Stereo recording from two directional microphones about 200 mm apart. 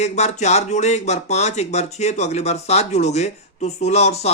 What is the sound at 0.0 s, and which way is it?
Speech, 35° left (ahead or behind).